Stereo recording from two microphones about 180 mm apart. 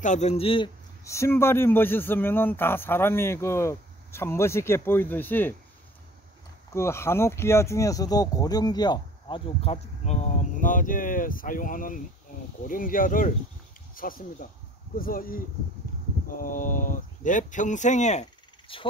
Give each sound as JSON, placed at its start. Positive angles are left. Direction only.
{"t": 0.0, "sound": "a man's voice", "side_deg": 40}
{"t": 1.0, "sound": "speech", "side_deg": 15}
{"t": 6.7, "sound": "speech", "side_deg": 15}
{"t": 18.7, "sound": "speech", "side_deg": 30}